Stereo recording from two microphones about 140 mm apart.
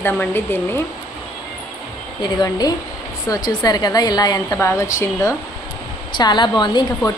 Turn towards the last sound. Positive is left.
turn(degrees=30)  # may be behind; listen again after turning